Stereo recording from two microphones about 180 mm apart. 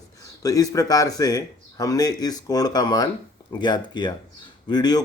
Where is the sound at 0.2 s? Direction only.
20° left (ahead or behind).